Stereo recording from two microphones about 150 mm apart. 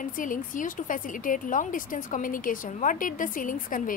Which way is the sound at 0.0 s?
65° left (ahead or behind).